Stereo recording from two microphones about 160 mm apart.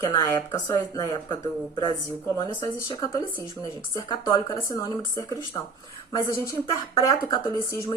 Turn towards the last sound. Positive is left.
turn(degrees=20)  # may be behind; listen again after turning